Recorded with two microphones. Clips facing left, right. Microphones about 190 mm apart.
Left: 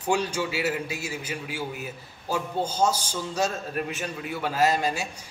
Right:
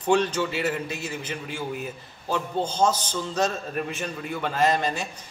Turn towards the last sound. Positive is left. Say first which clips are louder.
# even
turn(degrees=5)  # may be behind; listen again after turning